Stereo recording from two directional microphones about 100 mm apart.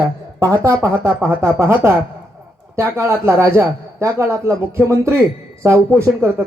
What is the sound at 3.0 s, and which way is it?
A man's voice, 25° right (ahead or behind).